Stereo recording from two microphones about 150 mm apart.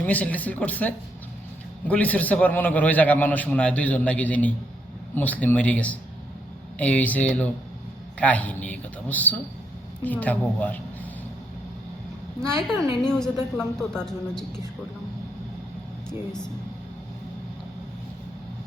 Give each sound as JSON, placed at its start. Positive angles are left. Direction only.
{"t": 0.0, "sound": "a man's voice", "side_deg": 10}
{"t": 12.4, "sound": "speech", "side_deg": 5}